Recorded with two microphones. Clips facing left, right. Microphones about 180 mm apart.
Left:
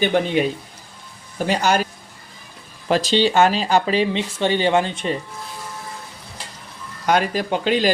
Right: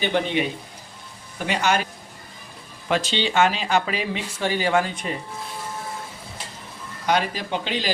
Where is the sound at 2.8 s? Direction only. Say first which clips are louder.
Left 6 dB; 35° left (ahead or behind).